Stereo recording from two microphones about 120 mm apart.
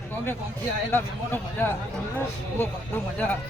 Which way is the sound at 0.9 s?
15° left (ahead or behind).